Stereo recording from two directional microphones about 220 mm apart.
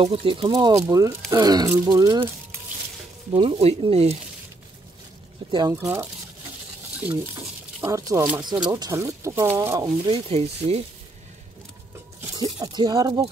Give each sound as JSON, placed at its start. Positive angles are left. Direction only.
{"t": 0.0, "sound": "speech", "side_deg": -25}
{"t": 3.3, "sound": "speech", "side_deg": -25}
{"t": 5.5, "sound": "speech", "side_deg": -15}
{"t": 7.8, "sound": "speech", "side_deg": -15}
{"t": 10.0, "sound": "speech", "side_deg": -25}
{"t": 12.5, "sound": "speech", "side_deg": -20}